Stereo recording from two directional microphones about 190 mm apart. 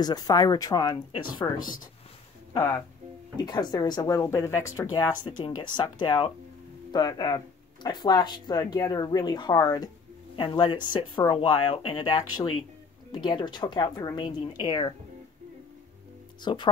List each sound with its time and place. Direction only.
0.0 s speech: 20° left (ahead or behind)
1.6 s speech: 45° left (ahead or behind)
2.5 s speech: 15° left (ahead or behind)
16.5 s speech: 25° left (ahead or behind)